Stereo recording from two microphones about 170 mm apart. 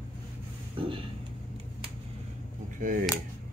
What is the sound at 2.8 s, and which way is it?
Speech, 50° right (ahead or behind).